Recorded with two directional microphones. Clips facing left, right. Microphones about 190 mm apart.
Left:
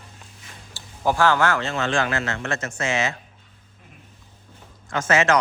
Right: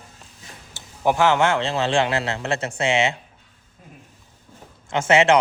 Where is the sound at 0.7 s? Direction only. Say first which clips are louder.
Right 2 dB; 20° right (ahead or behind).